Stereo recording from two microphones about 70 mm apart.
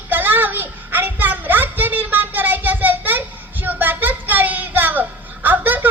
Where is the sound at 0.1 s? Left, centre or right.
Right.